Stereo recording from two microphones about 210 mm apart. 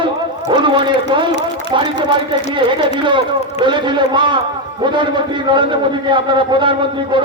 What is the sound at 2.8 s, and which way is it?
A man's voice, 25° right (ahead or behind).